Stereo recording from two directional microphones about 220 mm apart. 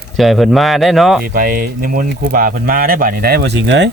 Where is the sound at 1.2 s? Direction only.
40° right (ahead or behind).